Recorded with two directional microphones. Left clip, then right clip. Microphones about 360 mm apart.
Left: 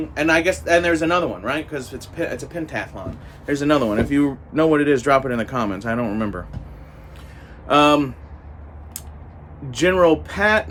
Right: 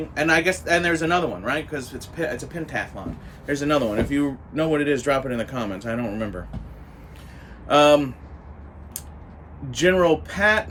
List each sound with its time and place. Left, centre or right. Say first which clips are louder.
0.1 s speech: left 2 dB; centre
7.7 s speech: left 1 dB; centre
9.7 s speech: left 3 dB; centre